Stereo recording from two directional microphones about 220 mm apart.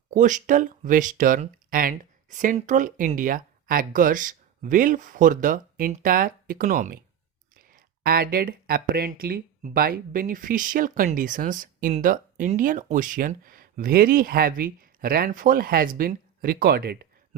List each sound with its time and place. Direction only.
0.1 s speech: 35° right (ahead or behind)